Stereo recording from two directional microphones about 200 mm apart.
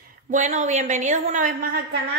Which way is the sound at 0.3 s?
40° right (ahead or behind).